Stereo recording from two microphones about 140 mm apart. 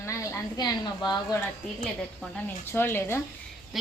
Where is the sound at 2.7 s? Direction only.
15° left (ahead or behind).